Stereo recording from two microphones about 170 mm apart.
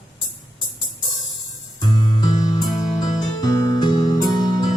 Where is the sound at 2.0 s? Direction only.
25° left (ahead or behind).